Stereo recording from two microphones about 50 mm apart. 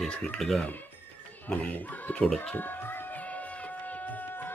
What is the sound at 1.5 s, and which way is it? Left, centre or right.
Speech, left.